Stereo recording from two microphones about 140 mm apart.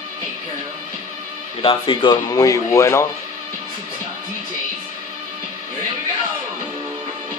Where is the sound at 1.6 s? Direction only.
40° left (ahead or behind); by 3.1 s 20° left (ahead or behind).